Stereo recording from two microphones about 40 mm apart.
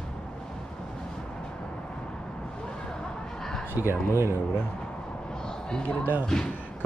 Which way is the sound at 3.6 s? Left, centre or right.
Right.